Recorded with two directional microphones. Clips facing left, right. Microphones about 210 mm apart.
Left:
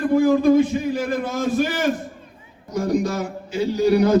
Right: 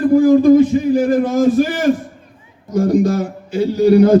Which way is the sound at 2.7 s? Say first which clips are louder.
Right 7 dB; 50° right (ahead or behind).